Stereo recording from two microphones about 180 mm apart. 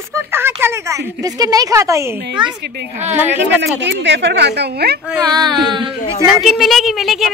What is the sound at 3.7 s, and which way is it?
A woman's voice, 80° right.